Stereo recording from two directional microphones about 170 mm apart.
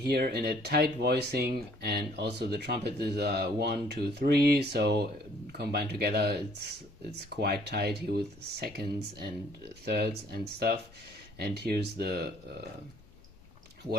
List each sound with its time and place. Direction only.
0.0 s speech: 70° right (ahead or behind)